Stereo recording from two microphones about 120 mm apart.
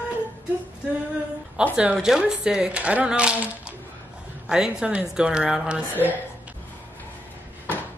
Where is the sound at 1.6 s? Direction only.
10° right (ahead or behind).